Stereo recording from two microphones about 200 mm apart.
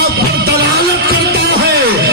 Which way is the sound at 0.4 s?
50° right (ahead or behind).